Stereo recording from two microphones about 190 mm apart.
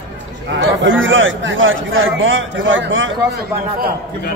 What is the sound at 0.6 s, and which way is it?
A man's voice, 85° right.